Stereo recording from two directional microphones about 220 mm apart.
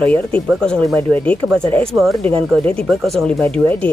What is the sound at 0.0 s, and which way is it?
Speech, 5° left (ahead or behind).